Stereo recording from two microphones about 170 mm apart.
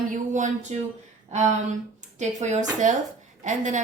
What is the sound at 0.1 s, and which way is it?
Speech, 45° right (ahead or behind).